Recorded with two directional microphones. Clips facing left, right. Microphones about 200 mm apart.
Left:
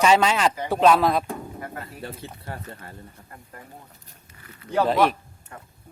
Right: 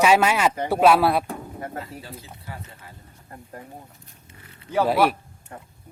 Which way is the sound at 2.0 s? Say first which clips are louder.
Left 4 dB; 60° left (ahead or behind).